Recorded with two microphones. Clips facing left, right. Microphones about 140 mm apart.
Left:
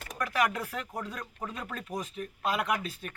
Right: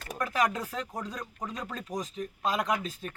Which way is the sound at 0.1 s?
25° right (ahead or behind).